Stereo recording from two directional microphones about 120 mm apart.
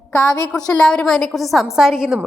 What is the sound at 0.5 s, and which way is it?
A woman's voice, 5° left (ahead or behind).